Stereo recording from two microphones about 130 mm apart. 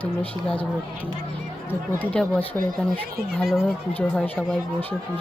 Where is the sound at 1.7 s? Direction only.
15° left (ahead or behind).